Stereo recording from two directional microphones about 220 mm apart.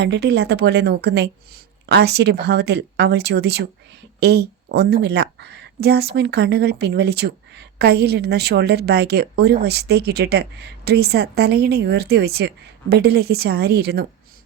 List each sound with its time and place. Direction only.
0.0 s speech: 50° right (ahead or behind)